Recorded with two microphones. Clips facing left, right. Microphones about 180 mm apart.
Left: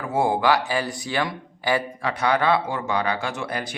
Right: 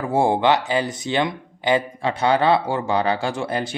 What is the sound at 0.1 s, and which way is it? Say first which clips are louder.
Speech: right 2 dB; 25° right (ahead or behind).